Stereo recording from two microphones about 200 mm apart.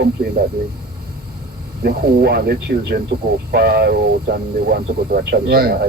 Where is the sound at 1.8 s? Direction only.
50° right (ahead or behind).